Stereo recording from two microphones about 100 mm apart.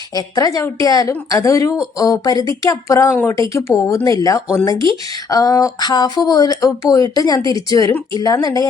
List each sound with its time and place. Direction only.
0.1 s speech: 40° left (ahead or behind)